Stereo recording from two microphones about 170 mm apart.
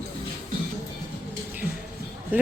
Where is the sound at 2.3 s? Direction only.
10° right (ahead or behind).